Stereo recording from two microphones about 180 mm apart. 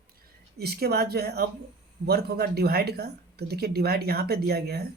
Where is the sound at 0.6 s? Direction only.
60° right (ahead or behind).